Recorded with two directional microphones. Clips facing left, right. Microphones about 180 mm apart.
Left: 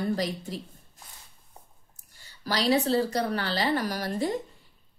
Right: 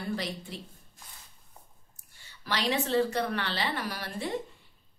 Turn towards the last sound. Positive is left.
turn(degrees=40)  # may be behind; listen again after turning